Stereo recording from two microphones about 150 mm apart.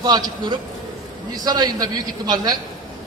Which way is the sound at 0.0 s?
25° right (ahead or behind).